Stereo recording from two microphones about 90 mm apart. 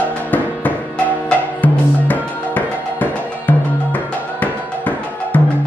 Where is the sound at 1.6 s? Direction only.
20° left (ahead or behind).